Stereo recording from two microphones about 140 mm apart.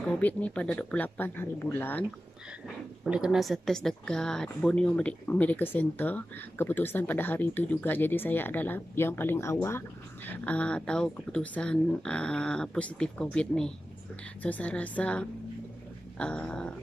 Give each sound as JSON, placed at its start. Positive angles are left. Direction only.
{"t": 0.1, "sound": "speech", "side_deg": 10}
{"t": 3.0, "sound": "speech", "side_deg": -5}